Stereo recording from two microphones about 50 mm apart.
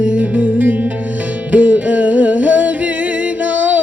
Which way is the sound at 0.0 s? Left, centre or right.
Right.